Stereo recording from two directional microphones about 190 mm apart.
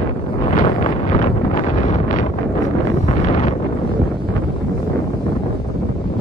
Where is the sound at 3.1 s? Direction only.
35° left (ahead or behind).